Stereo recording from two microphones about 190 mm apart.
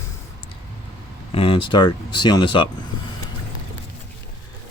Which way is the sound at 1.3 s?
30° left (ahead or behind).